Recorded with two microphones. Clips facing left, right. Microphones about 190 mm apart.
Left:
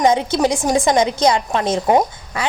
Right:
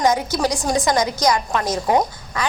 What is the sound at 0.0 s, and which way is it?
A woman's voice, 25° left (ahead or behind).